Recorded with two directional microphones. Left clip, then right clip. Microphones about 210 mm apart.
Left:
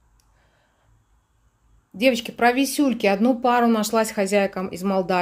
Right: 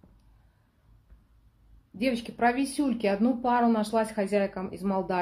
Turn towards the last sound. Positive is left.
turn(degrees=30)  # may be behind; listen again after turning